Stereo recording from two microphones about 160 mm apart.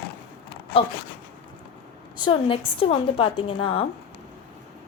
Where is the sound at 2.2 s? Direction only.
35° left (ahead or behind).